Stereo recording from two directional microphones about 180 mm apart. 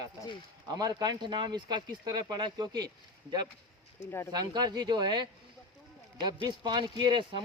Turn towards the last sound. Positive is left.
turn(degrees=-25)  # may be behind; listen again after turning